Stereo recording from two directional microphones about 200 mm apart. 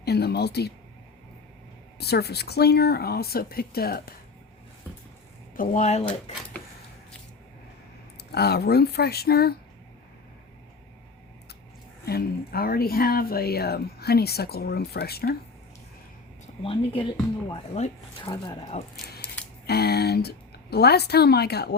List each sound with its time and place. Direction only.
0.0 s a sound: 55° left (ahead or behind)
2.0 s speech: 55° left (ahead or behind)
5.5 s speech: 35° left (ahead or behind)
8.3 s speech: 55° left (ahead or behind)
12.0 s speech: 50° left (ahead or behind)
16.6 s speech: 25° left (ahead or behind)
19.2 s camera: 5° left (ahead or behind)
19.6 s a woman's voice: 55° left (ahead or behind)